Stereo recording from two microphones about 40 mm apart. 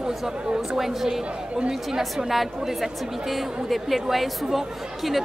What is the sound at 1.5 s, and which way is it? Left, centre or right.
Speech, right.